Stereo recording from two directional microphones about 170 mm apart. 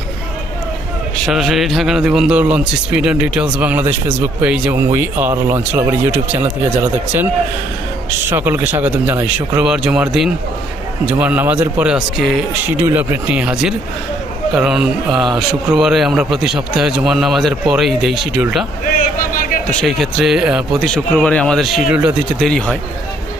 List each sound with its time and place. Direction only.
1.3 s a man's voice: centre (ahead or behind)
8.3 s a man's voice: 10° right (ahead or behind)
18.9 s a sound: 55° left (ahead or behind)
19.8 s a man's voice: centre (ahead or behind)